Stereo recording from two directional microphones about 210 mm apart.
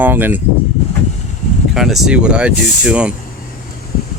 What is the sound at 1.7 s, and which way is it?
Speech, centre (ahead or behind).